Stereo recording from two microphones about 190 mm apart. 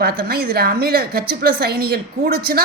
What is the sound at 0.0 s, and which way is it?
A woman's voice, 55° right (ahead or behind).